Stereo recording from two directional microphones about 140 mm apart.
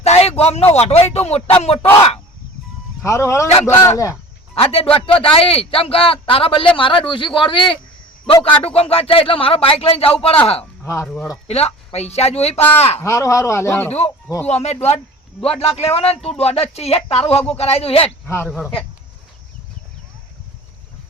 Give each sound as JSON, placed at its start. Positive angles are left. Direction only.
{"t": 0.0, "sound": "a sound", "side_deg": 50}
{"t": 0.8, "sound": "speech", "side_deg": 50}
{"t": 3.0, "sound": "speech", "side_deg": 20}
{"t": 4.5, "sound": "a man's voice", "side_deg": 45}
{"t": 10.8, "sound": "speech", "side_deg": 20}
{"t": 11.4, "sound": "speech", "side_deg": 50}
{"t": 13.0, "sound": "speech", "side_deg": 20}
{"t": 14.4, "sound": "speech", "side_deg": 50}
{"t": 18.3, "sound": "speech", "side_deg": 15}